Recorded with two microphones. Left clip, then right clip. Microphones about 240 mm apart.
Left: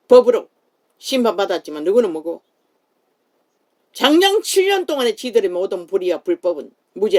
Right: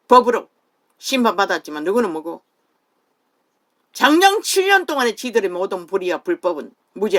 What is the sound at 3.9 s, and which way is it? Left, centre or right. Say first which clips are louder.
Speech: right 1 dB; right.